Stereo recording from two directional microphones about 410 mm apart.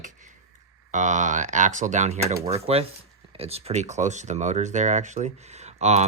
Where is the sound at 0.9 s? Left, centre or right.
Centre.